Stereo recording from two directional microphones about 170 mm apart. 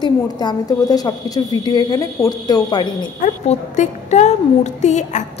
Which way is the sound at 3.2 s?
45° left (ahead or behind).